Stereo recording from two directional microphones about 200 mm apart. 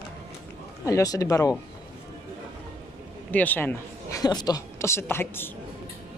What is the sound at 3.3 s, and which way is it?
A woman's voice, 10° left (ahead or behind).